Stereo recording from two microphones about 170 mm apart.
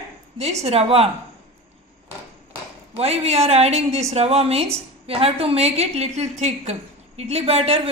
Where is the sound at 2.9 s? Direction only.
35° right (ahead or behind).